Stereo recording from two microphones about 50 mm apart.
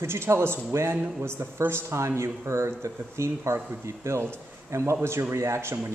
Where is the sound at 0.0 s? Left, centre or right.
Right.